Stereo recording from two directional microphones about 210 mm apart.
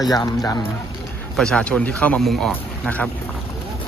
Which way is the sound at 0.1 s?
20° left (ahead or behind).